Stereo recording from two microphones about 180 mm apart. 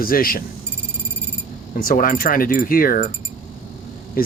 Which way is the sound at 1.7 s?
50° left (ahead or behind).